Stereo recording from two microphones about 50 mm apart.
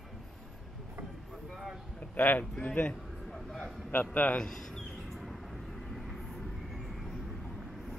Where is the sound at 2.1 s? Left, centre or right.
Left.